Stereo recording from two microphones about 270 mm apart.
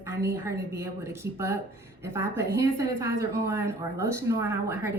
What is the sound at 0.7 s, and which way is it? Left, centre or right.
Speech, centre.